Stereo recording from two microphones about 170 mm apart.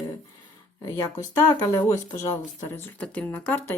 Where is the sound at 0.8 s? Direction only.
15° left (ahead or behind).